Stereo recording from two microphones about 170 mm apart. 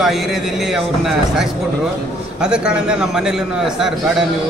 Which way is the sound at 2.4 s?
5° right (ahead or behind).